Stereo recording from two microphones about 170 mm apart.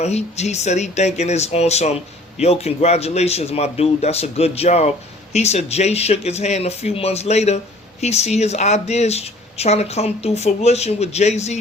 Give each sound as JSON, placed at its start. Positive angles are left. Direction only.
{"t": 0.0, "sound": "speech", "side_deg": 40}